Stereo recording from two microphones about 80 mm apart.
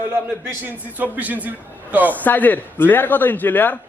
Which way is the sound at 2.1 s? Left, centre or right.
Left.